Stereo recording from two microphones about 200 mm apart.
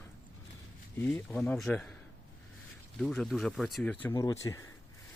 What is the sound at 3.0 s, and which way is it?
Speech, centre (ahead or behind).